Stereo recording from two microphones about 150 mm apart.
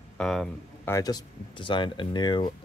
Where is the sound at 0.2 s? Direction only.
Centre (ahead or behind).